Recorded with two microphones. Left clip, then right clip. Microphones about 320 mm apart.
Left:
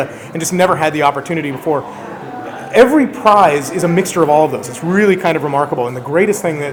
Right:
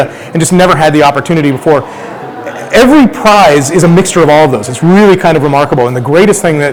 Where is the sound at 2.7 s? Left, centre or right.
Right.